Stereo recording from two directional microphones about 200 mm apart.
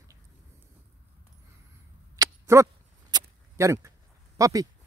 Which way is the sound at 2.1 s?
15° right (ahead or behind).